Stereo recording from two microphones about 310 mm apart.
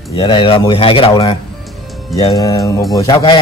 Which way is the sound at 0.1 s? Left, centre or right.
Centre.